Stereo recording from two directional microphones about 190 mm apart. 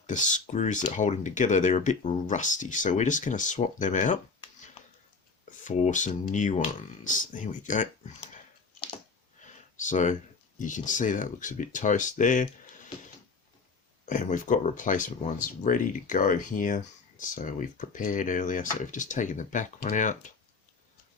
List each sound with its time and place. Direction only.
0.1 s speech: 40° left (ahead or behind)
5.5 s speech: 40° left (ahead or behind)
9.4 s a sound: 40° left (ahead or behind)
10.6 s speech: 40° left (ahead or behind)
14.0 s speech: 40° left (ahead or behind)